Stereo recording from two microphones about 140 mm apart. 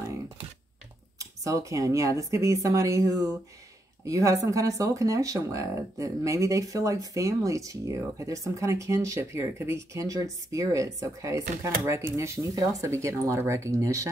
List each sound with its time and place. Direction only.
1.1 s speech: 25° right (ahead or behind)